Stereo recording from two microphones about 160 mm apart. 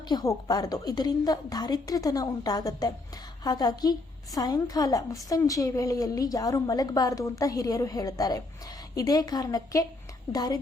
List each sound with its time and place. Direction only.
0.1 s a woman's voice: 25° left (ahead or behind)